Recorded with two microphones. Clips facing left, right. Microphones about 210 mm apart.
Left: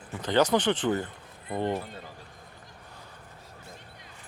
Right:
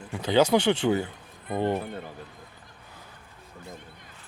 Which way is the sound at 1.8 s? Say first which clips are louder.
Right 6 dB; 55° right (ahead or behind).